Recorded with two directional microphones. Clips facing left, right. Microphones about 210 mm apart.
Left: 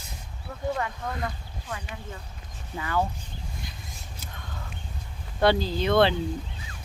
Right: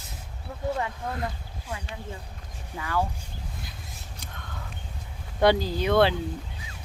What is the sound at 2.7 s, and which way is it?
Speech, centre (ahead or behind).